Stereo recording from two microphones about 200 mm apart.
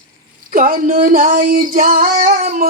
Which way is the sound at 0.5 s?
45° right (ahead or behind).